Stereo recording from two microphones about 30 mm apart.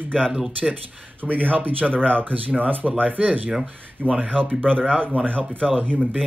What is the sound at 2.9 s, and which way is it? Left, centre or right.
Speech, right.